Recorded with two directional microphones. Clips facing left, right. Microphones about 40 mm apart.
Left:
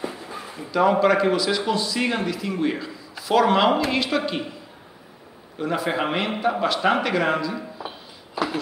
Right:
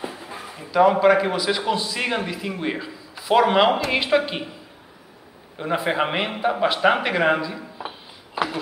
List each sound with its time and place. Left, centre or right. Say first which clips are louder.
0.7 s a man's voice: right 2 dB; centre
5.6 s speech: right 1 dB; right
7.8 s a sound: right 1 dB; right